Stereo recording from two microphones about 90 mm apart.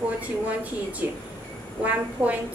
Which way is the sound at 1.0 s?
25° right (ahead or behind).